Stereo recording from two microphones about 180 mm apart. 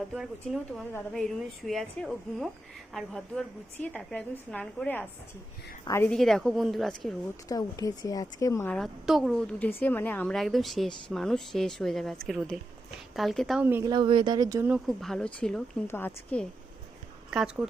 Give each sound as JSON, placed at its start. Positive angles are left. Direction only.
{"t": 0.1, "sound": "a woman's voice", "side_deg": 0}
{"t": 6.1, "sound": "a woman's voice", "side_deg": 0}
{"t": 7.4, "sound": "speech", "side_deg": 20}
{"t": 8.7, "sound": "a woman's voice", "side_deg": 0}
{"t": 13.7, "sound": "speech", "side_deg": -10}
{"t": 13.9, "sound": "speech", "side_deg": -25}
{"t": 14.7, "sound": "a woman's voice", "side_deg": 0}
{"t": 17.3, "sound": "a woman's voice", "side_deg": -5}